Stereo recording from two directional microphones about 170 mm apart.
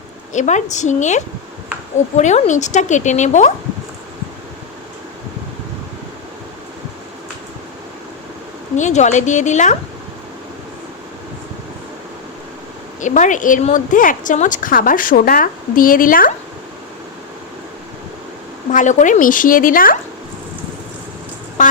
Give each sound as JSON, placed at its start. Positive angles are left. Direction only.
{"t": 0.3, "sound": "a woman's voice", "side_deg": 45}
{"t": 8.7, "sound": "a woman's voice", "side_deg": 45}
{"t": 13.0, "sound": "a woman's voice", "side_deg": 45}
{"t": 18.7, "sound": "a woman's voice", "side_deg": 45}
{"t": 21.6, "sound": "speech", "side_deg": 45}